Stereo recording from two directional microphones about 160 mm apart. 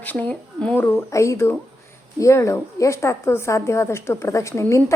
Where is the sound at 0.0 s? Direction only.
10° left (ahead or behind).